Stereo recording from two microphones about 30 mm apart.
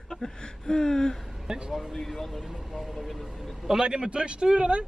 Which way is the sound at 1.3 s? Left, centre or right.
Centre.